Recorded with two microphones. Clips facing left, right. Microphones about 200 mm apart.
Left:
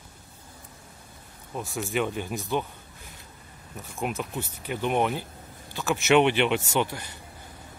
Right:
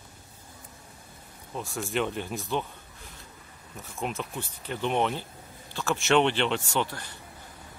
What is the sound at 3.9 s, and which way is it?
Speech, 5° left (ahead or behind).